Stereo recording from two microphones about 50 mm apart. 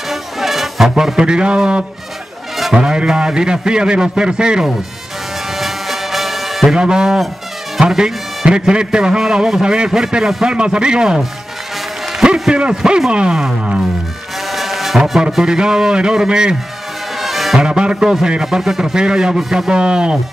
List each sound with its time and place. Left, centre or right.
0.1 s music: centre
2.7 s a man's voice: centre
5.6 s music: centre
6.7 s a man's voice: centre
7.9 s music: centre
8.5 s a man's voice: centre
12.2 s speech: centre
13.1 s a sound: centre
14.5 s music: centre
15.4 s a man's voice: centre
17.2 s music: centre
17.6 s a man's voice: centre
18.4 s a man's voice: centre
19.7 s a sound: centre